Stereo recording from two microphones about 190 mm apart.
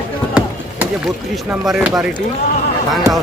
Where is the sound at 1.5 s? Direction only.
Centre (ahead or behind).